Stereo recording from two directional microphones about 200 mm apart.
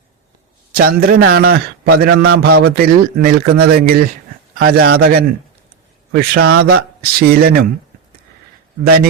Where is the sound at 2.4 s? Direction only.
90° right.